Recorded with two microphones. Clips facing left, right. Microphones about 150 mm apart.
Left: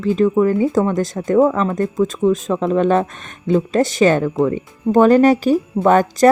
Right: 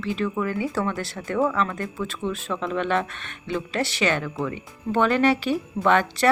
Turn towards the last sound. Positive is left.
turn(degrees=40)  # may be behind; listen again after turning